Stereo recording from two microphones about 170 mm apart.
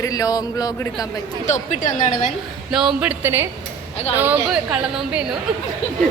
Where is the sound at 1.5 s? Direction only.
45° left (ahead or behind).